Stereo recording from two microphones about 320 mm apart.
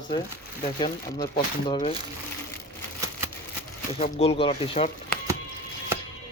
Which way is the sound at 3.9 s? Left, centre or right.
Centre.